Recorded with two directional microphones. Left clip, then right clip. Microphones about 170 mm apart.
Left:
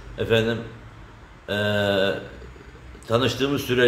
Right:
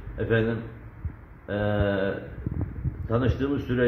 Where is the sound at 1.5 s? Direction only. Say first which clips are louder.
Left 4 dB; 20° left (ahead or behind).